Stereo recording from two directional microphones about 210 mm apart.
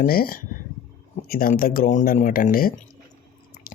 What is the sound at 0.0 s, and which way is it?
Speech, 45° left (ahead or behind).